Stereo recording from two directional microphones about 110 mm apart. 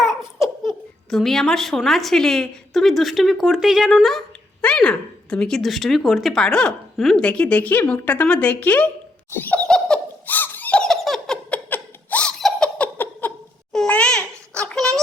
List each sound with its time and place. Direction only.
0.0 s speech: centre (ahead or behind)
7.2 s speech: 10° left (ahead or behind)
9.6 s giggle: 5° left (ahead or behind)
11.5 s a sound: 10° left (ahead or behind)
12.4 s laughter: 5° left (ahead or behind)
13.2 s a sound: 20° left (ahead or behind)